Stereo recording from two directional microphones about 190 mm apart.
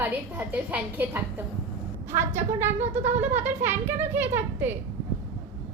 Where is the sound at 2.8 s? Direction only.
35° right (ahead or behind).